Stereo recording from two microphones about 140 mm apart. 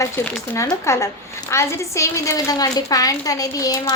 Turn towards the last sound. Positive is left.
turn(degrees=25)  # may be behind; listen again after turning